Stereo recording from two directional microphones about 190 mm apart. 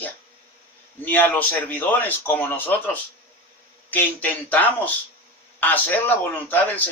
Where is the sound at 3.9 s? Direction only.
10° left (ahead or behind).